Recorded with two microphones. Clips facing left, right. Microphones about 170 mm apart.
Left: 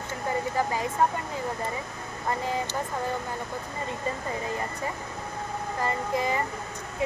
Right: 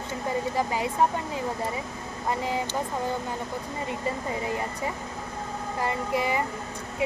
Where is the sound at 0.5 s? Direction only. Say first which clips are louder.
Even; 15° right (ahead or behind).